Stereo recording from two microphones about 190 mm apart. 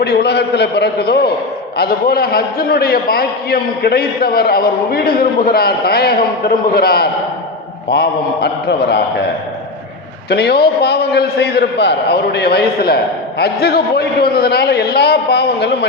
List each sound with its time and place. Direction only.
0.0 s a man's voice: 55° left (ahead or behind)